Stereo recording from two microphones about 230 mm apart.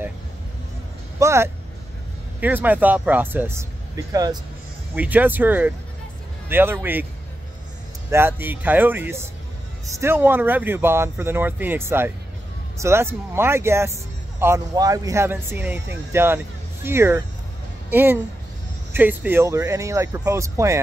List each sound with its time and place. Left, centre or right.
1.2 s speech: centre
8.1 s speech: centre